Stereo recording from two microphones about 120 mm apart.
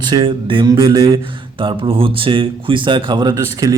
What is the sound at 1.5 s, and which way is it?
Speech, 45° right (ahead or behind).